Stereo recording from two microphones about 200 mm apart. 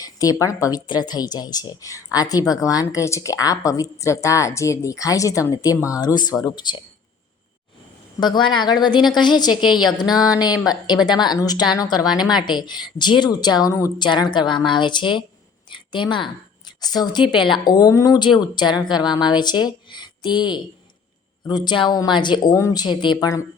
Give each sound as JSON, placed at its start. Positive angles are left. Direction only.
{"t": 0.0, "sound": "speech", "side_deg": 15}
{"t": 8.2, "sound": "a woman's voice", "side_deg": 20}